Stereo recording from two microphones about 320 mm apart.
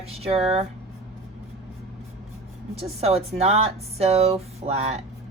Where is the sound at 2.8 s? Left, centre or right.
Centre.